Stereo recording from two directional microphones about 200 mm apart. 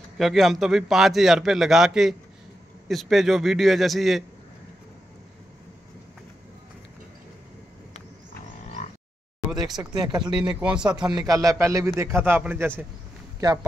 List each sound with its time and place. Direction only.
0.2 s a man's voice: centre (ahead or behind)
9.9 s speech: 20° right (ahead or behind)
10.3 s a man's voice: 5° right (ahead or behind)
11.1 s speech: 15° right (ahead or behind)